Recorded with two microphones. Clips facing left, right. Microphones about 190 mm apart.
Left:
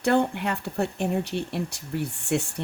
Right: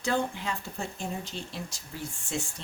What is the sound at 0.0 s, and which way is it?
Speech, 65° left (ahead or behind).